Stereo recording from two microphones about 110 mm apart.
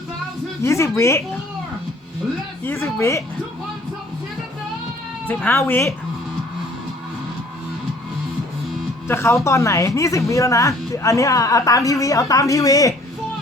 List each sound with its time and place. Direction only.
0.6 s a woman's voice: 25° left (ahead or behind)
2.6 s a woman's voice: 25° left (ahead or behind)
5.2 s a woman's voice: 20° left (ahead or behind)
9.0 s a woman's voice: 25° left (ahead or behind)